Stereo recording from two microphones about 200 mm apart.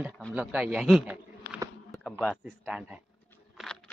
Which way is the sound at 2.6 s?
5° right (ahead or behind).